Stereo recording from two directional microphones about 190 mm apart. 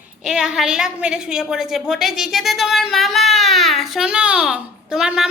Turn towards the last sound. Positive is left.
turn(degrees=-5)  # may be behind; listen again after turning